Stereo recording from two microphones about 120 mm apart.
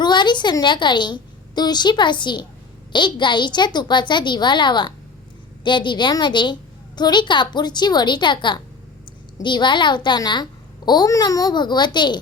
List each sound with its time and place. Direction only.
0.0 s a woman's voice: 40° left (ahead or behind)